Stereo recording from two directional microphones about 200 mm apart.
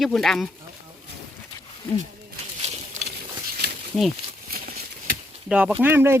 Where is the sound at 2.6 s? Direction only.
35° right (ahead or behind).